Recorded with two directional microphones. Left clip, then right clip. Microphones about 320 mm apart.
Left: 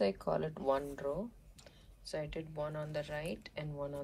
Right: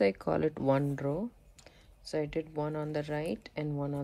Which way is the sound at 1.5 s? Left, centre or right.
Centre.